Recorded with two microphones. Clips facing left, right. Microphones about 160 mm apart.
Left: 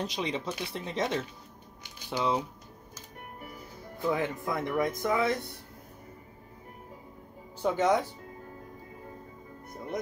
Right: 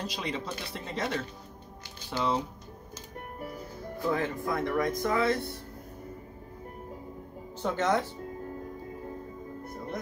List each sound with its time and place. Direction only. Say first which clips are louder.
0.0 s speech: left 2 dB; 20° left (ahead or behind)
4.1 s speech: even; 20° left (ahead or behind)
7.6 s speech: left 2 dB; 10° left (ahead or behind)